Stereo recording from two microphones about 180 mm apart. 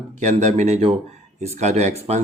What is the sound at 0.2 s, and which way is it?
Speech, 40° right (ahead or behind).